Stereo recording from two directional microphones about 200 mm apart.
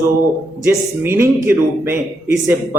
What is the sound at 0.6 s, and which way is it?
Speech, 10° right (ahead or behind).